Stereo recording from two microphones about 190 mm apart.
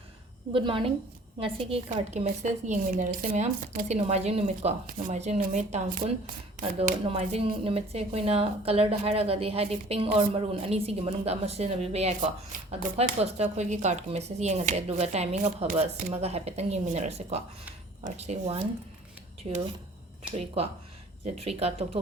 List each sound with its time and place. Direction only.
0.5 s a woman's voice: 25° right (ahead or behind); by 6.3 s 40° right (ahead or behind)
6.6 s speech: 30° right (ahead or behind)
21.3 s speech: 30° right (ahead or behind)